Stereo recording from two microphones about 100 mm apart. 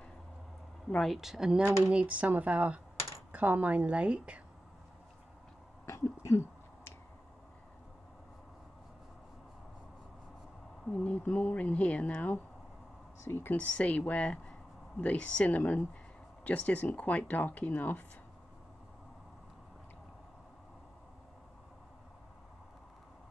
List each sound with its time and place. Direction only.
0.8 s a woman's voice: 5° left (ahead or behind); by 4.4 s 10° right (ahead or behind)
5.9 s a sound: 30° left (ahead or behind)
10.9 s speech: 15° left (ahead or behind)